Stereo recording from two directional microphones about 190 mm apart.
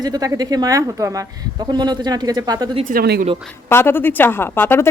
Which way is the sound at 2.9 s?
50° right (ahead or behind).